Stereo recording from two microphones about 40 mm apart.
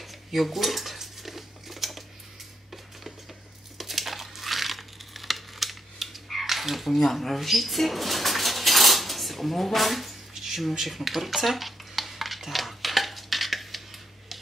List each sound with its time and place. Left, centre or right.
0.0 s dishes: centre
3.7 s crumpling: centre
6.9 s speech: centre
7.3 s dishes: centre
10.8 s a sound: centre